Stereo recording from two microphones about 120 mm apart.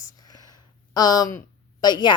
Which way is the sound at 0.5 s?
35° left (ahead or behind).